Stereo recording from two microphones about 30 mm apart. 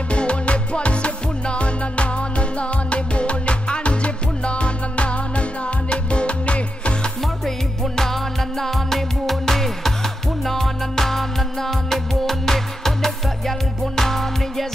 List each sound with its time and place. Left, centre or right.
0.1 s music: left
7.9 s music: centre